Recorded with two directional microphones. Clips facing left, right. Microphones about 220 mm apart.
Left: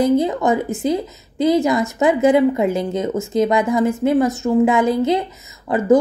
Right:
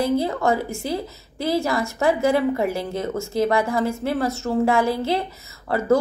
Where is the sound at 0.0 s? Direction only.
20° left (ahead or behind).